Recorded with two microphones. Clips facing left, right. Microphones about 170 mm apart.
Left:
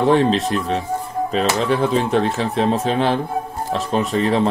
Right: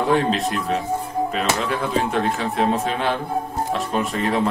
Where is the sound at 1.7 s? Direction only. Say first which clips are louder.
Left 5 dB; 30° left (ahead or behind).